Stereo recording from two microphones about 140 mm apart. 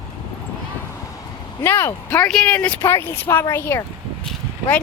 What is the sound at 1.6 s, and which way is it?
Speech, 15° left (ahead or behind).